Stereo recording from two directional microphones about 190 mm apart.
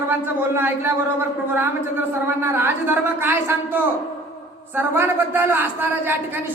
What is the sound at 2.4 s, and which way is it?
A man's voice, 10° right (ahead or behind).